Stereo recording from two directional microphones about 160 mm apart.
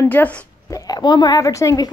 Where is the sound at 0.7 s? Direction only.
25° left (ahead or behind).